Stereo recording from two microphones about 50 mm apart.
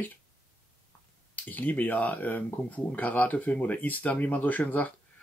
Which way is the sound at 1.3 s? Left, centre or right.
Left.